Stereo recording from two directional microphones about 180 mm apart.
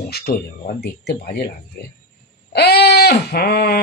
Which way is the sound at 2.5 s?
65° left (ahead or behind).